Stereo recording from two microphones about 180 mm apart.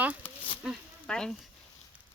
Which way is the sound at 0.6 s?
Centre (ahead or behind).